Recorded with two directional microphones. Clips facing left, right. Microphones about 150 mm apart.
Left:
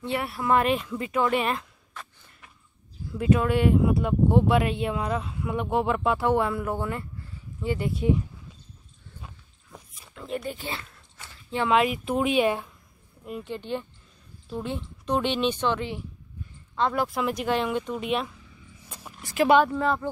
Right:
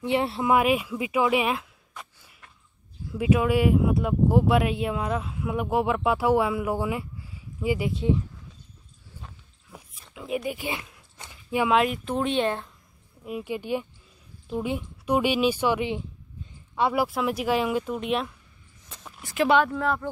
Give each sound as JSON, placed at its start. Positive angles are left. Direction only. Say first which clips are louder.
{"t": 0.0, "sound": "speech", "louder": "right 5 dB", "side_deg": -20}
{"t": 0.5, "sound": "speech", "louder": "even", "side_deg": -10}
{"t": 7.9, "sound": "speech", "louder": "left 1 dB", "side_deg": 10}
{"t": 9.7, "sound": "a sound", "louder": "even", "side_deg": -5}
{"t": 11.7, "sound": "speech", "louder": "left 2 dB", "side_deg": 0}
{"t": 13.2, "sound": "speech", "louder": "right 3 dB", "side_deg": -10}
{"t": 18.8, "sound": "a sound", "louder": "left 1 dB", "side_deg": 10}
{"t": 19.1, "sound": "speech", "louder": "left 2 dB", "side_deg": 0}